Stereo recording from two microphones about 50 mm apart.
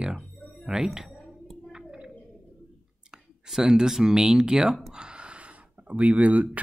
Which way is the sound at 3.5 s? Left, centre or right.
Centre.